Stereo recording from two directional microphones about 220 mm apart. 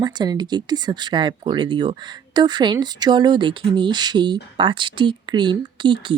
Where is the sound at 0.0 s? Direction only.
20° right (ahead or behind).